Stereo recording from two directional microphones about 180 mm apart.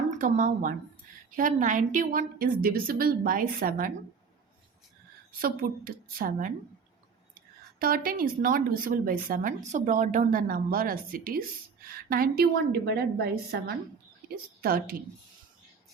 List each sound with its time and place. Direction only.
0.2 s a woman's voice: 50° right (ahead or behind)
5.4 s a woman's voice: 55° right (ahead or behind)